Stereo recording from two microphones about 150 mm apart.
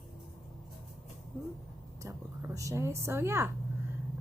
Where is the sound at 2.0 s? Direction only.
15° right (ahead or behind).